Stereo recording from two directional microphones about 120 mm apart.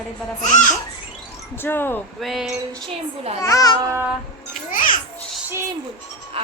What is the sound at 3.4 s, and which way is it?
Speech, 30° left (ahead or behind).